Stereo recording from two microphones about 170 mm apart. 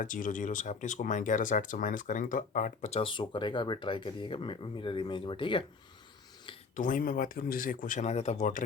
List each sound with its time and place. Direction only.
0.0 s speech: 50° left (ahead or behind); by 5.6 s 30° left (ahead or behind)
6.7 s speech: 50° left (ahead or behind)